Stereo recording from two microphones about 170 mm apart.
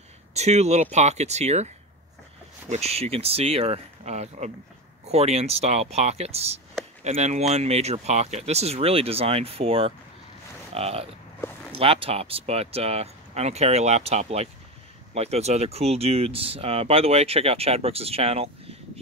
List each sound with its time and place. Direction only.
0.3 s speech: 40° right (ahead or behind)
2.7 s speech: 40° right (ahead or behind)